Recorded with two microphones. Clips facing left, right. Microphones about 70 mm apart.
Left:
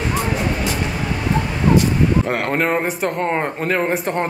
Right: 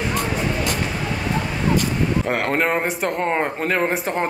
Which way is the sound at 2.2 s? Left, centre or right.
Centre.